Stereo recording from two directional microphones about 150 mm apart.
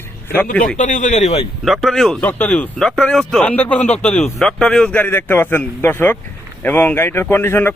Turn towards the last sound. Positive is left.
turn(degrees=15)  # may be behind; listen again after turning